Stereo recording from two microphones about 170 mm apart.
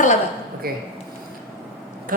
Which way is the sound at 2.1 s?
55° right (ahead or behind).